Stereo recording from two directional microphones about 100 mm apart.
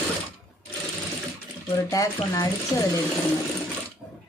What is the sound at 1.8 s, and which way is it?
Speech, 35° left (ahead or behind).